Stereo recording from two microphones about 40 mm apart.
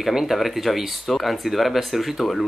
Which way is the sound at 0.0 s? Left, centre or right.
Centre.